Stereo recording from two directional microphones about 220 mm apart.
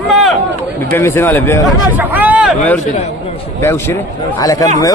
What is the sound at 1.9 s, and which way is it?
Vehicle, 5° right (ahead or behind).